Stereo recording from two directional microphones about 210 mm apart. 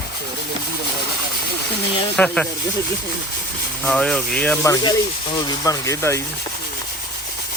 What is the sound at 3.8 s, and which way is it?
Speech, 5° left (ahead or behind).